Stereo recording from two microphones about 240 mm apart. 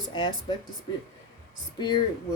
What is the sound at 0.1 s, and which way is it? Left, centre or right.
Speech, centre.